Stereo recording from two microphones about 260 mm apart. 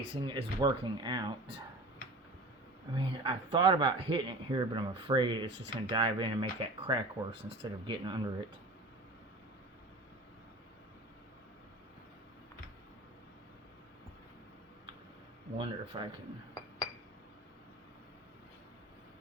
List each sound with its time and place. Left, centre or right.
0.1 s speech: centre
2.9 s speech: centre
15.5 s speech: centre